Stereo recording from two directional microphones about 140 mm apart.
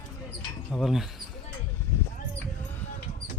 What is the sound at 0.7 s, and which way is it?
Speech, centre (ahead or behind).